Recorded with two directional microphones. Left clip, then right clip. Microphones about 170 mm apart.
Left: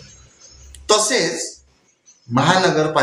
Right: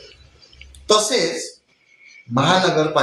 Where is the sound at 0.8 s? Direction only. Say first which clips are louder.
Even; 20° left (ahead or behind).